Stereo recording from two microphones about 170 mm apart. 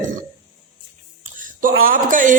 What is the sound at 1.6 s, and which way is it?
Speech, 55° right (ahead or behind).